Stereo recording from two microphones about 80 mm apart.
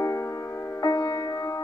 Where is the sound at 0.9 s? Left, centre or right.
Left.